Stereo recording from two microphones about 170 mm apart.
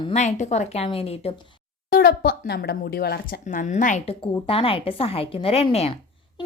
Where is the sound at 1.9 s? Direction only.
65° left (ahead or behind); by 4.1 s 45° left (ahead or behind).